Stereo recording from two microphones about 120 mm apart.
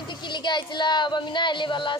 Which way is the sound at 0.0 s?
40° left (ahead or behind).